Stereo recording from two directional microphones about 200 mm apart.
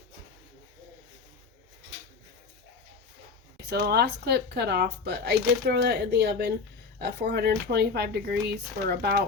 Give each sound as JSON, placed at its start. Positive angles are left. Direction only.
{"t": 3.7, "sound": "speech", "side_deg": -55}